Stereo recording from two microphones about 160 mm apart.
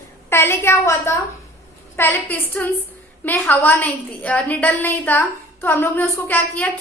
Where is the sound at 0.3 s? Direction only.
15° left (ahead or behind).